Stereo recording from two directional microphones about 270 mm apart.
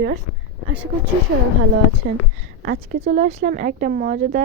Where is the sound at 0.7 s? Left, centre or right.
Centre.